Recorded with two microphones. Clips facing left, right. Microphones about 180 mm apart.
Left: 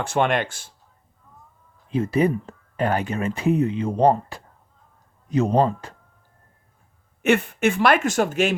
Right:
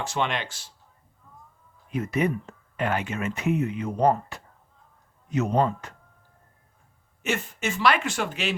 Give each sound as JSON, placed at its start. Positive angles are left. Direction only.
{"t": 0.0, "sound": "speech", "side_deg": 55}
{"t": 1.9, "sound": "speech", "side_deg": 30}
{"t": 7.2, "sound": "speech", "side_deg": 60}